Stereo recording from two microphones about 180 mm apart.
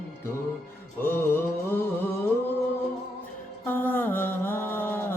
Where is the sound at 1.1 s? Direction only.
10° left (ahead or behind).